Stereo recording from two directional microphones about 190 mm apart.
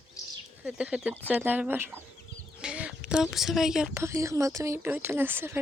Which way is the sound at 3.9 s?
15° right (ahead or behind).